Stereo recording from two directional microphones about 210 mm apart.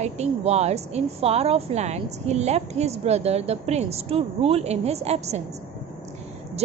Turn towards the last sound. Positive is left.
turn(degrees=-30)  # may be behind; listen again after turning